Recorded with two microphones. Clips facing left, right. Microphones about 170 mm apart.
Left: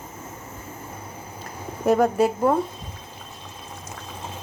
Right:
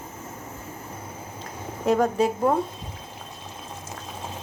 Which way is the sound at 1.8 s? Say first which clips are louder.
Left 2 dB; 10° left (ahead or behind).